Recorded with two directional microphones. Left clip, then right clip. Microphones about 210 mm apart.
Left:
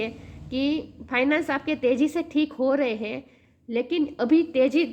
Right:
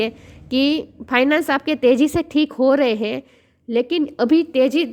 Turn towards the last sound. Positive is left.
turn(degrees=-45)  # may be behind; listen again after turning